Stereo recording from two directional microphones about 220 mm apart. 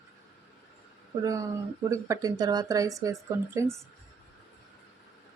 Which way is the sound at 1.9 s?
15° right (ahead or behind).